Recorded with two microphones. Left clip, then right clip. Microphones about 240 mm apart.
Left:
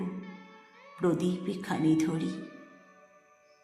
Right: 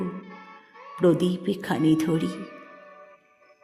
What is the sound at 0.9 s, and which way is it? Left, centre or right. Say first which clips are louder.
Music: right 8 dB; right.